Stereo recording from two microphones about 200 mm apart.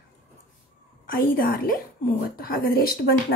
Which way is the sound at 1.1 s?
50° left (ahead or behind).